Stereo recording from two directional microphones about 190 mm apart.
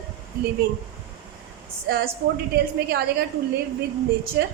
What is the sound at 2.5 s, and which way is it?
Speech, 55° right (ahead or behind).